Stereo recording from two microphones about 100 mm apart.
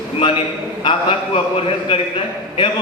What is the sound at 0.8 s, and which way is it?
Speech, 60° left (ahead or behind).